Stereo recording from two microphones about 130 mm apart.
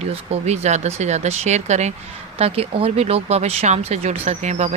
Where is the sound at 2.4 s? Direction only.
50° right (ahead or behind).